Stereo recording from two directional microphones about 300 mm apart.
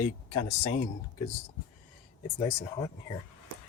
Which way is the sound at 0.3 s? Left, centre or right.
Left.